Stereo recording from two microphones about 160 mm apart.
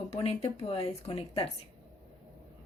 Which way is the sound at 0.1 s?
40° left (ahead or behind).